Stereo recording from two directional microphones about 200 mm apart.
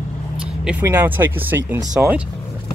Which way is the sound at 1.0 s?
10° right (ahead or behind).